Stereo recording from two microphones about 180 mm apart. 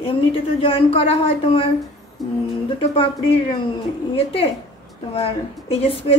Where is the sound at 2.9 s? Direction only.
30° left (ahead or behind).